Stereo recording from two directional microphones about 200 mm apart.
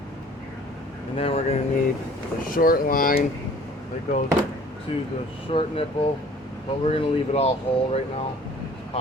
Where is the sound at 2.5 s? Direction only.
45° left (ahead or behind).